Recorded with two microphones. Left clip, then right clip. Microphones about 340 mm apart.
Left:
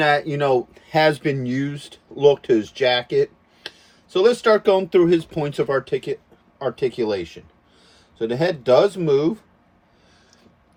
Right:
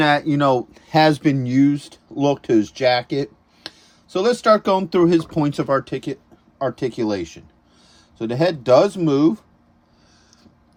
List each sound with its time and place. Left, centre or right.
0.0 s speech: centre